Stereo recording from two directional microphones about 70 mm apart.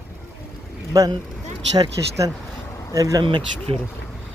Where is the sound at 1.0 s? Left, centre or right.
Right.